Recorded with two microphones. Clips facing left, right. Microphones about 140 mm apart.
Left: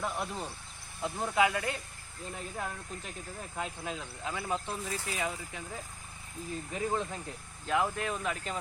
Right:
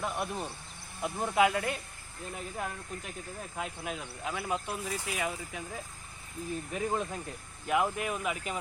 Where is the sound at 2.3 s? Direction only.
10° right (ahead or behind).